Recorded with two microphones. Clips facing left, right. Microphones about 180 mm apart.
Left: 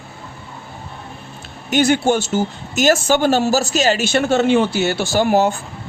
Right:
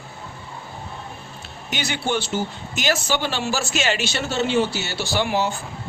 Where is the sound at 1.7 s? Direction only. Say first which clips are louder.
Left 10 dB; 50° left (ahead or behind).